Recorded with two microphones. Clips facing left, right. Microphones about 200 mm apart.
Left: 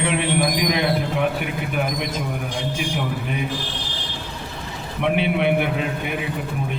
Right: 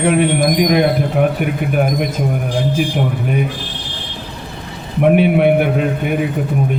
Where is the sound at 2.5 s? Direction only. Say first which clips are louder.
Right 9 dB; 35° right (ahead or behind).